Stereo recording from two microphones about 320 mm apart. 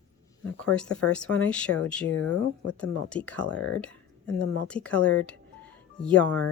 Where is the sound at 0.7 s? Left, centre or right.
Centre.